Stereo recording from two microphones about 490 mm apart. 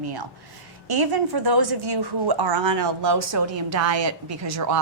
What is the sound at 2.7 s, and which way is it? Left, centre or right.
Speech, right.